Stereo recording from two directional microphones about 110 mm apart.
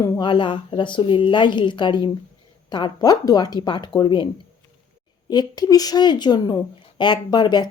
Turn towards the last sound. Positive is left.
turn(degrees=40)  # may be behind; listen again after turning